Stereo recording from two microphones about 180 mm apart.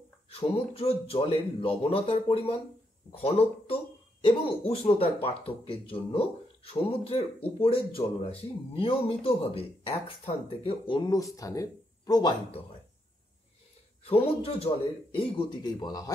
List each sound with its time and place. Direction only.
0.3 s speech: 35° left (ahead or behind)
14.0 s a man's voice: 30° left (ahead or behind)